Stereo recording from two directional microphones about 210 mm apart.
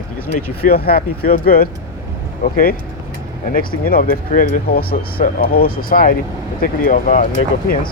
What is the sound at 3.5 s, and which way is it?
Speech, 45° left (ahead or behind).